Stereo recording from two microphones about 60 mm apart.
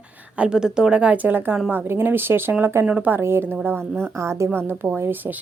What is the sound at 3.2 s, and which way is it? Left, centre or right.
Speech, right.